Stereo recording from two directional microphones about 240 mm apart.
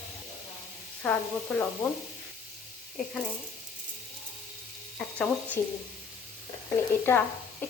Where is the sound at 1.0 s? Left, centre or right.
Centre.